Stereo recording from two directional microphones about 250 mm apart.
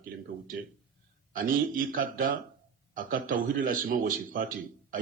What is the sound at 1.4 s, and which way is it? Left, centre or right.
A man's voice, right.